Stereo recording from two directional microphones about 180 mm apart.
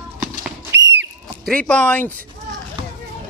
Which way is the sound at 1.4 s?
5° left (ahead or behind).